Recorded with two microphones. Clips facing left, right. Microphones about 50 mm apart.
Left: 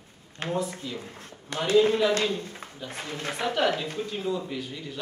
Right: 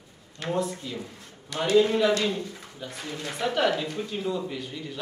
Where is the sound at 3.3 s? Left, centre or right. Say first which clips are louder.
Right 1 dB; centre.